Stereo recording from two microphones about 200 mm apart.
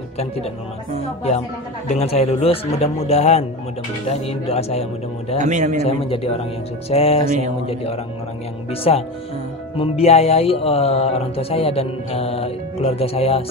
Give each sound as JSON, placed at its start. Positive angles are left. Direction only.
{"t": 1.9, "sound": "speech", "side_deg": 30}
{"t": 5.4, "sound": "a man's voice", "side_deg": -40}
{"t": 5.8, "sound": "speech", "side_deg": 30}